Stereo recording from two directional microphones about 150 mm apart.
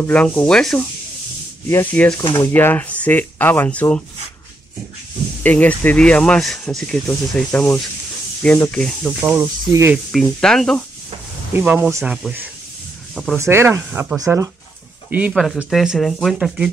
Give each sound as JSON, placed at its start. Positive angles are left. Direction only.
{"t": 0.0, "sound": "speech", "side_deg": 10}
{"t": 1.7, "sound": "speech", "side_deg": 15}
{"t": 5.4, "sound": "speech", "side_deg": 10}
{"t": 9.2, "sound": "speech", "side_deg": -15}
{"t": 10.2, "sound": "speech", "side_deg": 5}
{"t": 11.5, "sound": "speech", "side_deg": -10}
{"t": 12.0, "sound": "speech", "side_deg": 0}
{"t": 13.4, "sound": "speech", "side_deg": -15}
{"t": 14.2, "sound": "speech", "side_deg": -20}